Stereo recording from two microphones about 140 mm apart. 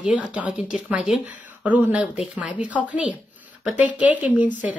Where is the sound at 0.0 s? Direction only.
10° right (ahead or behind).